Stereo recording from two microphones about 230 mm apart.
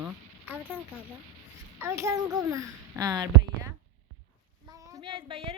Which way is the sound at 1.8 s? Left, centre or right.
Centre.